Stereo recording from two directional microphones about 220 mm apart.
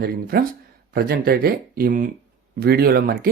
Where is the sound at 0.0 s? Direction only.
40° right (ahead or behind).